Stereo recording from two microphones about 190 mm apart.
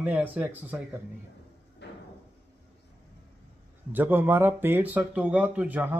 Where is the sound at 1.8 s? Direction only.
65° left (ahead or behind).